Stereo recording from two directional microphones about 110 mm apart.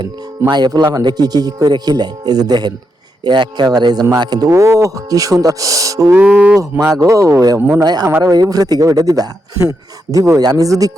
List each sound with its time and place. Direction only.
0.5 s a man's voice: 40° right (ahead or behind)
6.1 s speech: 10° right (ahead or behind)
6.6 s a man's voice: 30° right (ahead or behind)